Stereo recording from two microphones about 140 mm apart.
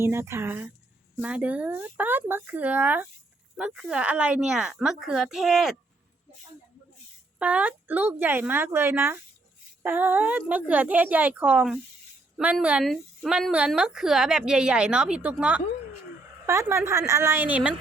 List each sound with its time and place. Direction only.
0.0 s speech: 20° right (ahead or behind); by 5.7 s 5° right (ahead or behind)
7.3 s speech: 10° right (ahead or behind)
16.5 s a woman's voice: 20° right (ahead or behind)